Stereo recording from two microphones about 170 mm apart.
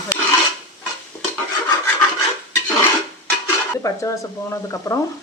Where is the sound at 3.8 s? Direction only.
20° left (ahead or behind).